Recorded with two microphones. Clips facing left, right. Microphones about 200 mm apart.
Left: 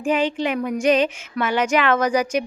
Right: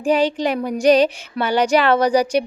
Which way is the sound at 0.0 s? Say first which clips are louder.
Right 3 dB; 35° right (ahead or behind).